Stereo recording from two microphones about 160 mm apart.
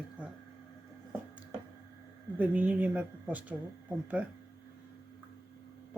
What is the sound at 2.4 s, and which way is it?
Speech, 10° right (ahead or behind).